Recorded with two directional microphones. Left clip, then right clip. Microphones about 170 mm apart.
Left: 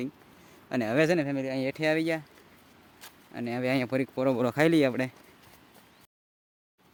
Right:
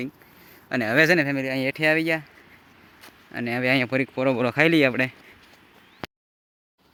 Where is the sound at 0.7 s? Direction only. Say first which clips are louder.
Right 6 dB; 10° left (ahead or behind); by 2.2 s 10° right (ahead or behind).